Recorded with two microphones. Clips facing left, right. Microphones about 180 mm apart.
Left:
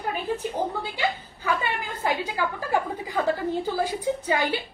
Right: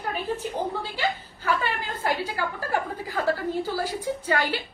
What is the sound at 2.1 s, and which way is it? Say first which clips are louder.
A woman's voice: left 1 dB; 15° left (ahead or behind).